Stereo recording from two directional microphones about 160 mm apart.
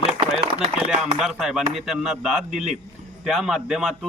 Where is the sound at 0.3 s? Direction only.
5° right (ahead or behind).